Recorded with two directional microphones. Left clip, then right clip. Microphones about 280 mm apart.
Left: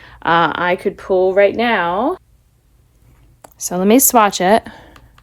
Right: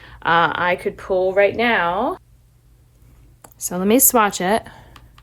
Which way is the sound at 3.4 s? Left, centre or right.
Left.